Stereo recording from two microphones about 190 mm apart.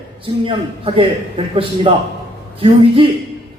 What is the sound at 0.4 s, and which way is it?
A man's voice, 30° right (ahead or behind).